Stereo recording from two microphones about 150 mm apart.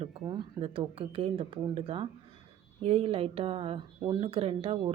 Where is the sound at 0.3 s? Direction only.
35° right (ahead or behind).